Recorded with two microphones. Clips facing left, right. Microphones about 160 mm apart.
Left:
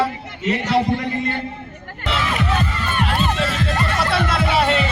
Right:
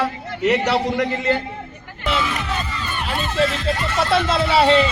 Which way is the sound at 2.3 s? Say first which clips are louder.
Left 4 dB; 65° left (ahead or behind).